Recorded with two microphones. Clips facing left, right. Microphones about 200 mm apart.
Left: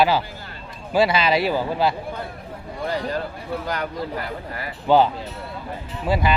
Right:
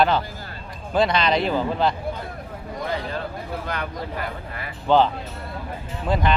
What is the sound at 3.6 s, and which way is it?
Speech, 35° left (ahead or behind).